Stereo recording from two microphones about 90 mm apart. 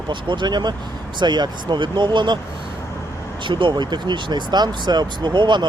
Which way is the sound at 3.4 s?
60° right (ahead or behind).